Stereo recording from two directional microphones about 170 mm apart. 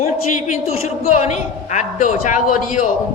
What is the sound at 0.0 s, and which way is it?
A man's voice, 45° left (ahead or behind).